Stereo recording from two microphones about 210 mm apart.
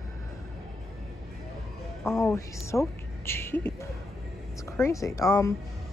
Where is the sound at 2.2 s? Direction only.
15° left (ahead or behind).